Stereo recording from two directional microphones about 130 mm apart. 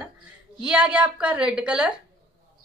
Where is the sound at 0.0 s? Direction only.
10° right (ahead or behind).